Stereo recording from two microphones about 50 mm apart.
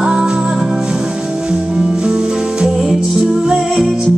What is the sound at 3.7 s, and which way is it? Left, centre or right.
Music, centre.